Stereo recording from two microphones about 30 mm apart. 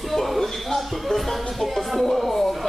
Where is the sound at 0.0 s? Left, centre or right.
Centre.